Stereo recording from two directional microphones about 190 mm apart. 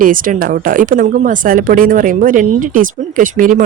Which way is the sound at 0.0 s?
45° right (ahead or behind).